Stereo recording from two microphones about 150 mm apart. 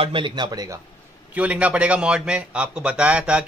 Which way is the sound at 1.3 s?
10° right (ahead or behind).